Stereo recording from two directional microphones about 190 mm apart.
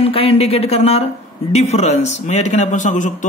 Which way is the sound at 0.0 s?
30° left (ahead or behind).